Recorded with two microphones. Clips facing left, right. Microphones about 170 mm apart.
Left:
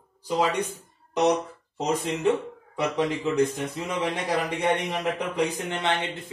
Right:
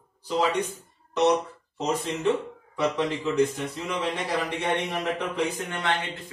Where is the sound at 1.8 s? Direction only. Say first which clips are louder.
Left 1 dB; 15° left (ahead or behind).